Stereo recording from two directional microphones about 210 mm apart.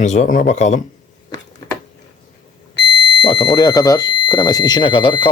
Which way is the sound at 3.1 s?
20° left (ahead or behind).